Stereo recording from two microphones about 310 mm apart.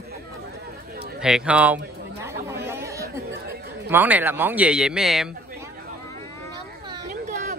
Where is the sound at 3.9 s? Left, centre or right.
Centre.